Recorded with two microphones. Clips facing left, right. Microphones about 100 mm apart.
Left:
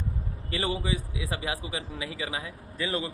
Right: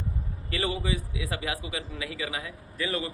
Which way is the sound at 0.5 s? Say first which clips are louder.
Even; 25° left (ahead or behind).